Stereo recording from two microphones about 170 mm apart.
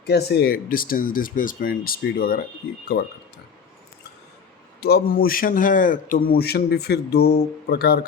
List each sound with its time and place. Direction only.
0.0 s a man's voice: 70° left (ahead or behind)
4.8 s a man's voice: 70° left (ahead or behind)